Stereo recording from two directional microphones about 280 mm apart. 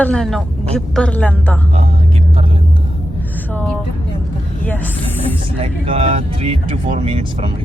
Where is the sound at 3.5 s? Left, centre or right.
Centre.